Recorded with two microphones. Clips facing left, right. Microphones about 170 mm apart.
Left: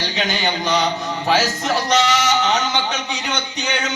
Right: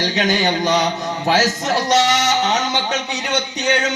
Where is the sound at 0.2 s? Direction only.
40° right (ahead or behind).